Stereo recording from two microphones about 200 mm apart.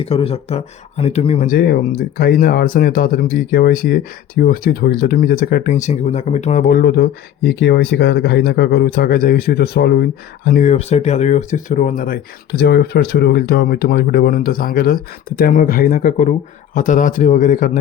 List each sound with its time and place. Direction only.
0.0 s speech: 30° left (ahead or behind)
1.5 s speech: 50° left (ahead or behind)